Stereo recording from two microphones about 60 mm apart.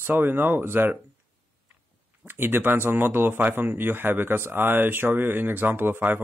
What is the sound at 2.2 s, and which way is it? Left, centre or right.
Speech, right.